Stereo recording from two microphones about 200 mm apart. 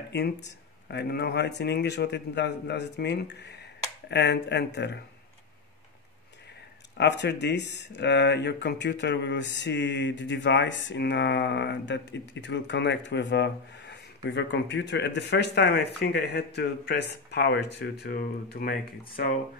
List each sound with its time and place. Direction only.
0.1 s speech: 55° left (ahead or behind)
7.0 s speech: 60° left (ahead or behind)